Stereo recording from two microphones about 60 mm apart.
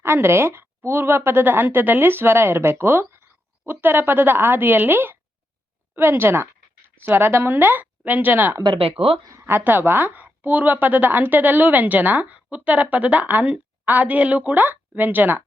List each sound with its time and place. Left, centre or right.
0.0 s a woman's voice: right